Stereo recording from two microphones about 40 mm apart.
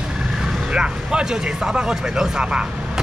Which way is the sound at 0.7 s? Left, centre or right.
Right.